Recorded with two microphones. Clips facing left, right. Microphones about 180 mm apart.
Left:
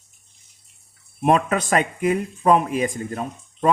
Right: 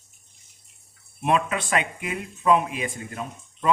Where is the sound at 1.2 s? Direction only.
40° left (ahead or behind).